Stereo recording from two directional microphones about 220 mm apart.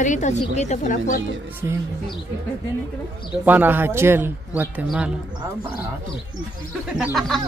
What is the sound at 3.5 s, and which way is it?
A man's voice, 10° right (ahead or behind).